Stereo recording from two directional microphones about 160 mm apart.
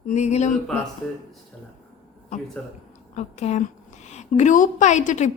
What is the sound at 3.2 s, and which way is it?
A woman's voice, 45° left (ahead or behind).